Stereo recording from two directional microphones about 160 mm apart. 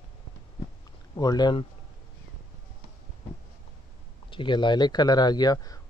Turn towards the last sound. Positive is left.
turn(degrees=25)  # may be behind; listen again after turning